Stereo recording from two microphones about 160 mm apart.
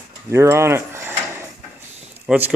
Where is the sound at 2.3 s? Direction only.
5° right (ahead or behind).